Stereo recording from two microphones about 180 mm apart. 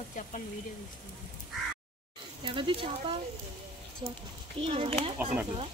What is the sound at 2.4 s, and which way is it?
Speech, 30° right (ahead or behind).